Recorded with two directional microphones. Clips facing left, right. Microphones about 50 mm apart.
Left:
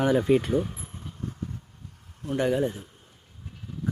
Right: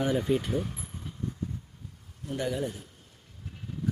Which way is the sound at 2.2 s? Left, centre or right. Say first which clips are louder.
Left 6 dB; left.